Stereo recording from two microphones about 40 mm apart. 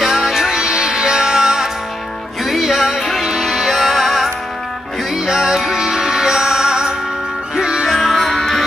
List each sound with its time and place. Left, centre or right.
0.0 s music: centre
0.4 s music: centre
2.4 s music: centre
7.8 s music: centre